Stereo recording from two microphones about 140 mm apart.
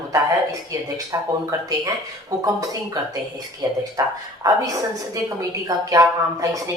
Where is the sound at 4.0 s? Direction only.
25° right (ahead or behind).